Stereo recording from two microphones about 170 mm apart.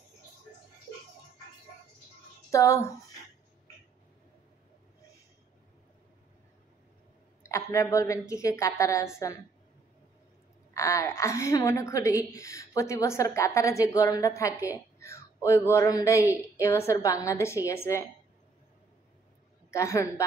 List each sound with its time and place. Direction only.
2.5 s a woman's voice: 15° left (ahead or behind)
7.4 s a woman's voice: 15° left (ahead or behind)
10.7 s a woman's voice: 20° left (ahead or behind)
19.7 s a woman's voice: 15° left (ahead or behind)